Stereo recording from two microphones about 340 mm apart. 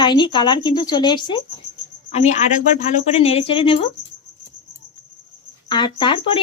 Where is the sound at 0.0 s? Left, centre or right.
Centre.